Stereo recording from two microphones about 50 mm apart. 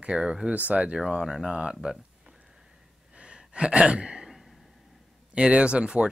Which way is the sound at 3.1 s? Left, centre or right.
Centre.